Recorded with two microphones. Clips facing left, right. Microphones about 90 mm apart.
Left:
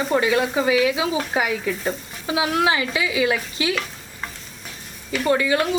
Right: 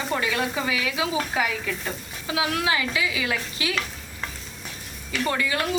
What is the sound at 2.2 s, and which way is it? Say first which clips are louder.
Speech: left 5 dB; 20° left (ahead or behind).